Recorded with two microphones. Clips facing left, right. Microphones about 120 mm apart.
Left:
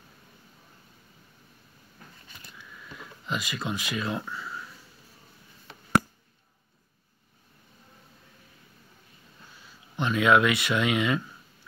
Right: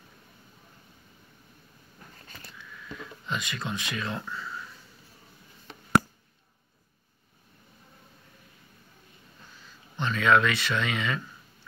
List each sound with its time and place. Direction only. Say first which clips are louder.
3.0 s speech: left 1 dB; 5° left (ahead or behind)
9.9 s speech: left 2 dB; 10° left (ahead or behind)